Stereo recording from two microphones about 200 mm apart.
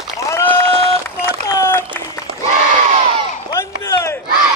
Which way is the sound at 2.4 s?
30° right (ahead or behind).